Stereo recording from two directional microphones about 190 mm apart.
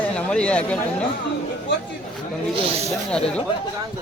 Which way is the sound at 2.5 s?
35° right (ahead or behind).